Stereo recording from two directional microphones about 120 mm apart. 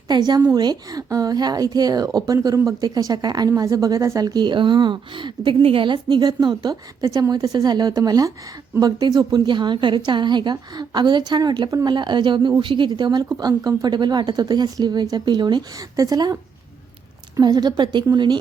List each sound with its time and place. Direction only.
0.1 s a woman's voice: 35° right (ahead or behind)